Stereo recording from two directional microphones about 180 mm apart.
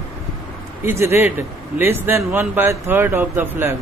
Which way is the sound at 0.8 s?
15° right (ahead or behind).